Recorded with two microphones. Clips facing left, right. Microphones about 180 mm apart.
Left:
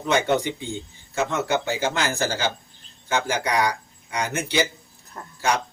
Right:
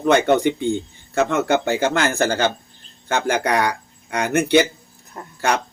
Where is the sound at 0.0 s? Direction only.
60° right (ahead or behind).